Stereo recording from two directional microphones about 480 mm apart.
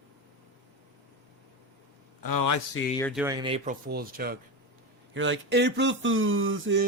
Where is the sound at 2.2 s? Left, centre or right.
Left.